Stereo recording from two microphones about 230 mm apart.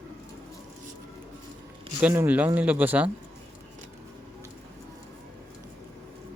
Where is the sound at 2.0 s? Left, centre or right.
Centre.